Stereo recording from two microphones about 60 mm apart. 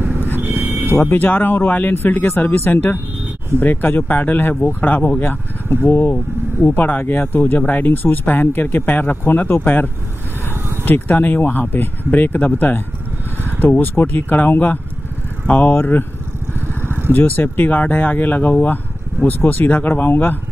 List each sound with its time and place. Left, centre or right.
0.0 s vehicle: right
0.9 s speech: left
10.9 s speech: left
16.8 s vehicle: right
17.1 s speech: left